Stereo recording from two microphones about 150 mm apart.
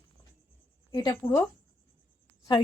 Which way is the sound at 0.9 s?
30° left (ahead or behind).